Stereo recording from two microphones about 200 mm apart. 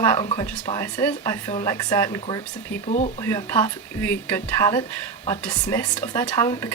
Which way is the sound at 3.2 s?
15° left (ahead or behind).